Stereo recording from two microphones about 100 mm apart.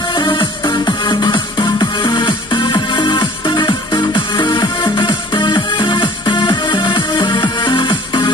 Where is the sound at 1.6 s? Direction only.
40° left (ahead or behind).